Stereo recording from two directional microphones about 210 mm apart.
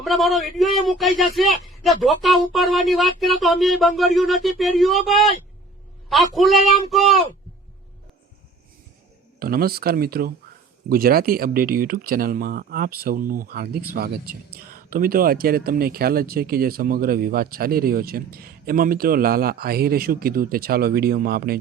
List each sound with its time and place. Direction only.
0.0 s a man's voice: centre (ahead or behind)
9.4 s speech: 45° right (ahead or behind)